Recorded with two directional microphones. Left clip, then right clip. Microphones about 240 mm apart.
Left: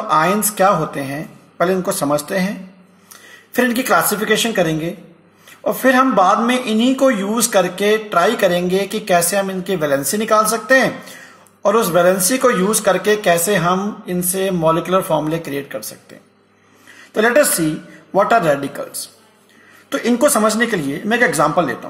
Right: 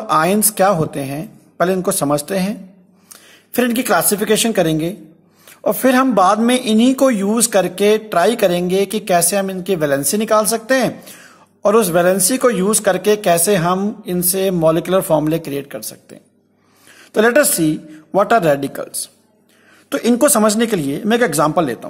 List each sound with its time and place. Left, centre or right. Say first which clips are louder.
0.1 s speech: right 1 dB; right
3.5 s speech: left 1 dB; right
17.1 s a woman's voice: right 1 dB; right
20.1 s speech: right 1 dB; right